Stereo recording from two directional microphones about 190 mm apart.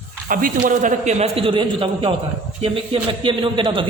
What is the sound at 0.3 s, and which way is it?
A man's voice, 45° right (ahead or behind).